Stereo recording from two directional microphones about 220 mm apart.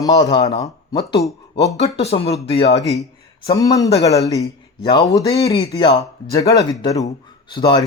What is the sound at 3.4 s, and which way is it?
A man's voice, 15° left (ahead or behind).